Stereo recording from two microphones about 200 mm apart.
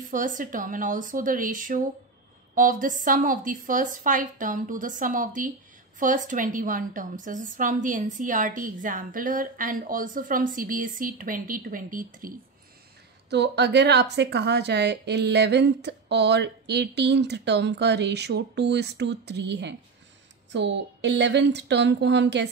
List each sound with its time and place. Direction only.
0.1 s a woman's voice: 40° right (ahead or behind)
13.3 s a woman's voice: 60° right (ahead or behind)